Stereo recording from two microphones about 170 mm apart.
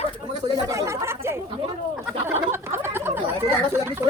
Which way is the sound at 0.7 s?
15° right (ahead or behind).